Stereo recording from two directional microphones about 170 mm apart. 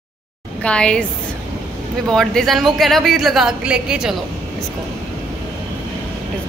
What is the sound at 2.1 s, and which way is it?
A woman's voice, 5° left (ahead or behind).